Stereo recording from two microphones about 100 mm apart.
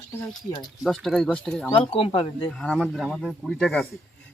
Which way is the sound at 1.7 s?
65° left (ahead or behind).